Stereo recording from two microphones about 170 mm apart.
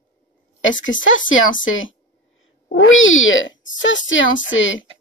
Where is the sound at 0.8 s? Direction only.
90° left.